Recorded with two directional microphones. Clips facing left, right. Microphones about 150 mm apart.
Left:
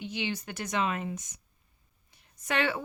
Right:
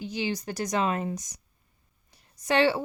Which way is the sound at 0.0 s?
35° right (ahead or behind).